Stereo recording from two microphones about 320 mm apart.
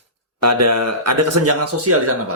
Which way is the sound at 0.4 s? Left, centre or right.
Right.